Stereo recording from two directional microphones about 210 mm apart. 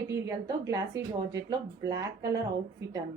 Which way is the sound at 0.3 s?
15° right (ahead or behind).